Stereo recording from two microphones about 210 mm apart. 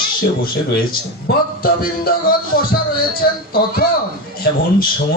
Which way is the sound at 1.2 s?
45° left (ahead or behind).